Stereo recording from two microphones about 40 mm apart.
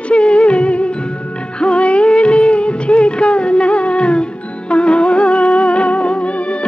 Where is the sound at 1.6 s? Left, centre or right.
Left.